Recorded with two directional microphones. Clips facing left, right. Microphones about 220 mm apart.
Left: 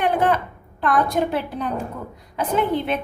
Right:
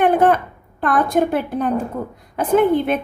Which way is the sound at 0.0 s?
50° right (ahead or behind).